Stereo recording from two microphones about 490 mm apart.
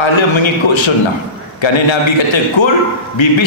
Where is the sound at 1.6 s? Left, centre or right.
Left.